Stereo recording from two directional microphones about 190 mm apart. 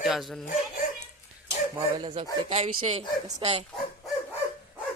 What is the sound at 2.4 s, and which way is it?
Speech, 35° right (ahead or behind).